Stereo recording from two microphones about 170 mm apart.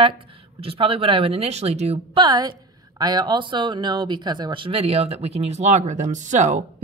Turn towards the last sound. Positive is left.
turn(degrees=-45)  # may be behind; listen again after turning